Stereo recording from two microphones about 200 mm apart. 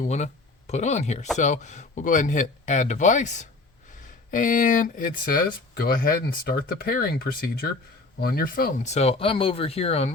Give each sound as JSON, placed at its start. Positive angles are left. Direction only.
{"t": 0.0, "sound": "speech", "side_deg": 35}